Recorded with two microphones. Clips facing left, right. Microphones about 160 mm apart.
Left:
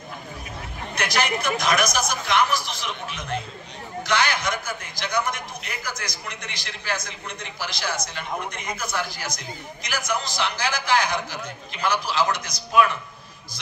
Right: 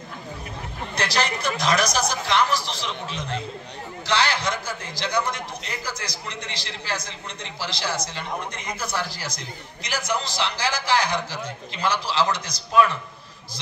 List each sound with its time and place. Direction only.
0.9 s a man's voice: 30° right (ahead or behind)